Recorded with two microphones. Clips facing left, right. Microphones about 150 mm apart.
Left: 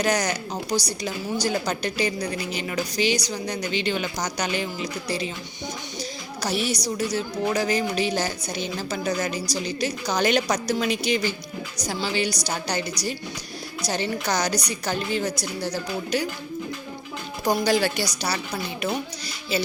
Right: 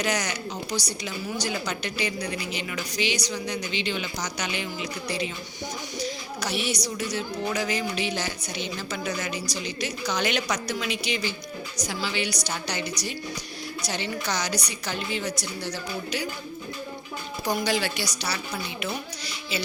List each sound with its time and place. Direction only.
0.0 s a woman's voice: 40° left (ahead or behind)
6.4 s a woman's voice: 40° left (ahead or behind)
13.8 s a woman's voice: 40° left (ahead or behind)
17.4 s a woman's voice: 45° left (ahead or behind)